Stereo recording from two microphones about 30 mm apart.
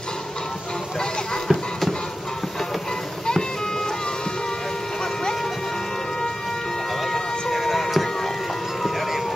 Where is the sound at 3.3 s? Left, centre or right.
Centre.